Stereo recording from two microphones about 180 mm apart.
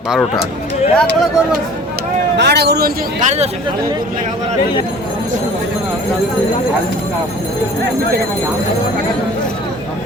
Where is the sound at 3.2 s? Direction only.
40° right (ahead or behind).